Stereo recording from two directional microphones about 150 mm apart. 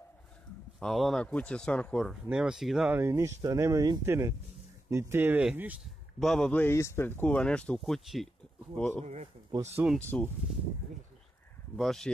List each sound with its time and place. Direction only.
0.7 s speech: centre (ahead or behind)
3.0 s speech: 20° right (ahead or behind)
6.1 s speech: centre (ahead or behind)
8.7 s speech: 10° left (ahead or behind)
9.0 s speech: 50° right (ahead or behind)
9.9 s speech: 10° left (ahead or behind)
11.7 s speech: centre (ahead or behind)